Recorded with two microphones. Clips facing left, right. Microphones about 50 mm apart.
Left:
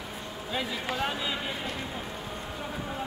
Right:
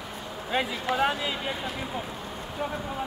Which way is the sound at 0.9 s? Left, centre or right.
Centre.